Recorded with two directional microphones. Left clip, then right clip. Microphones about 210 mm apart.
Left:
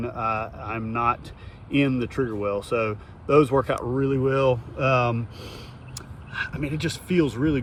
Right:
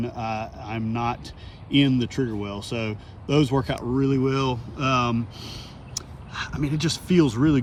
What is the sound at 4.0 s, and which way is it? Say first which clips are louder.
Speech: left 1 dB; 10° right (ahead or behind).